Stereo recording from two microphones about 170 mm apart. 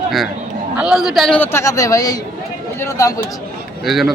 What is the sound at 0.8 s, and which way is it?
A man's voice, 5° right (ahead or behind).